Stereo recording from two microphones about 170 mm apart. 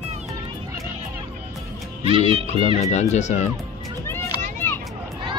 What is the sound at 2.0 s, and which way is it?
Music, 30° right (ahead or behind).